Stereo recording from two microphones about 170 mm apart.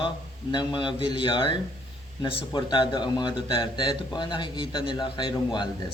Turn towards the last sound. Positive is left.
turn(degrees=25)  # may be behind; listen again after turning